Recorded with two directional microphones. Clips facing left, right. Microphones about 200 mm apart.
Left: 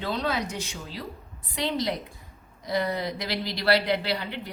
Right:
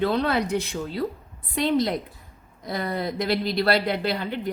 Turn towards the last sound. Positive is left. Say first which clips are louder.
# right 4 dB
turn(degrees=-50)  # may be behind; listen again after turning